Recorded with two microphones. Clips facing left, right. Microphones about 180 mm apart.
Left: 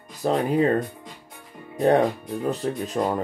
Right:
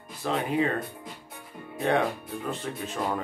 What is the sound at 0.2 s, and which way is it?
Speech, 40° left (ahead or behind).